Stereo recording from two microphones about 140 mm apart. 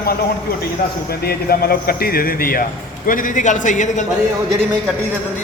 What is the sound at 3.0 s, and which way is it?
A man's voice, 75° left (ahead or behind).